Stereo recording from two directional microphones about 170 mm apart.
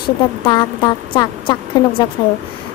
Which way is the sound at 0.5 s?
25° left (ahead or behind).